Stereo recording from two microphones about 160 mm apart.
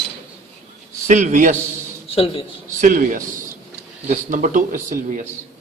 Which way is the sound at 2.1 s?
35° left (ahead or behind).